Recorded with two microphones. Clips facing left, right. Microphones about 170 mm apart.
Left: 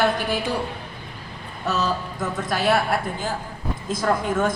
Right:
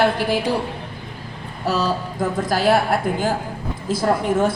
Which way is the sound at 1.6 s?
30° right (ahead or behind).